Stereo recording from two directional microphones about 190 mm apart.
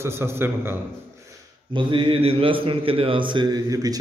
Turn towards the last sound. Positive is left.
turn(degrees=-20)  # may be behind; listen again after turning